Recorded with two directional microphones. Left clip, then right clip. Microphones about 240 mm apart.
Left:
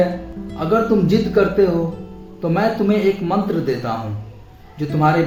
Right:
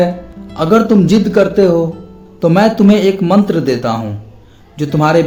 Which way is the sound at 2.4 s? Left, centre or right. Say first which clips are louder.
Right 8 dB; right.